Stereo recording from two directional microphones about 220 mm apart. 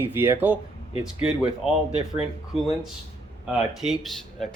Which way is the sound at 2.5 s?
25° left (ahead or behind).